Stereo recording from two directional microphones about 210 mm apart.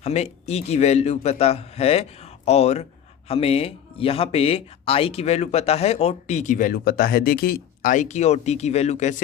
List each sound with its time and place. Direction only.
0.0 s speech: 30° left (ahead or behind)